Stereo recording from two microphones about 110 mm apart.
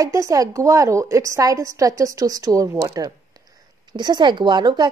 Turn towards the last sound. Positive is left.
turn(degrees=-40)  # may be behind; listen again after turning